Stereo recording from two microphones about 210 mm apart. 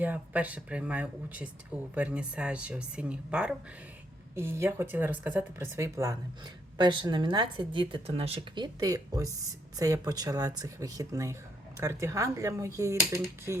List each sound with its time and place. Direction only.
0.0 s speech: 5° right (ahead or behind)